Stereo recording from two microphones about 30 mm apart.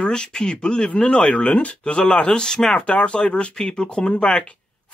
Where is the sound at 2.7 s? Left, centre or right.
Left.